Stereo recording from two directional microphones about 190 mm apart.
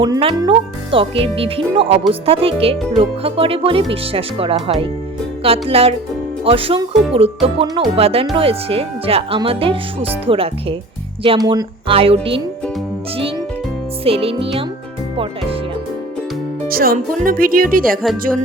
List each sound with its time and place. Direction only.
0.0 s speech: 25° right (ahead or behind)
5.4 s music: 30° right (ahead or behind)
6.4 s speech: 30° right (ahead or behind)
14.0 s speech: 30° right (ahead or behind)
16.6 s music: 50° right (ahead or behind)
17.2 s speech: 50° right (ahead or behind)